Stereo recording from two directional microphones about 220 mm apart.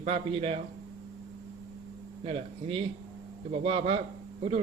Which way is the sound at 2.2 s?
25° right (ahead or behind).